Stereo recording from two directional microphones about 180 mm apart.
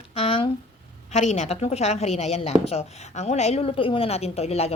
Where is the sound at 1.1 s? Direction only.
40° left (ahead or behind).